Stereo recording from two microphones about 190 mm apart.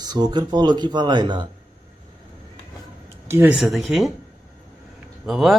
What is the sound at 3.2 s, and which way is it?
Speech, 10° right (ahead or behind).